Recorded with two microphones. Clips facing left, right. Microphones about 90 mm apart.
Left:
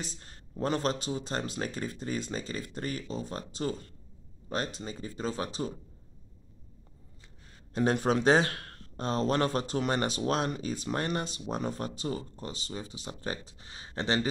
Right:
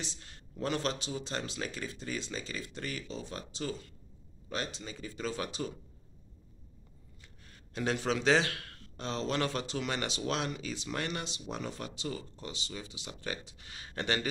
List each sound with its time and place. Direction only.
0.0 s speech: 40° left (ahead or behind)
7.7 s speech: 40° left (ahead or behind)